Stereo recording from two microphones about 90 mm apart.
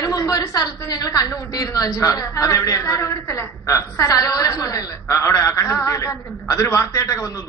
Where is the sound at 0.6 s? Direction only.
45° left (ahead or behind).